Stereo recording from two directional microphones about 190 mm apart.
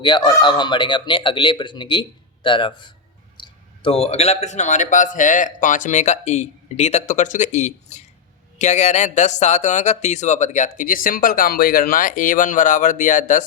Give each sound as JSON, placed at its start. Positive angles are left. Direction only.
{"t": 0.0, "sound": "a man's voice", "side_deg": 25}